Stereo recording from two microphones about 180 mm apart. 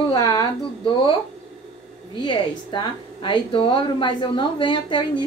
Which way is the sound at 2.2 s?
25° left (ahead or behind).